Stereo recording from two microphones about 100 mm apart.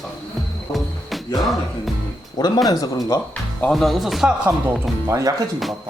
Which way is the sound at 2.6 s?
40° left (ahead or behind).